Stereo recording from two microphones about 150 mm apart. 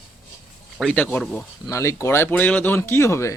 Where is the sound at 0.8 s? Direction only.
5° left (ahead or behind).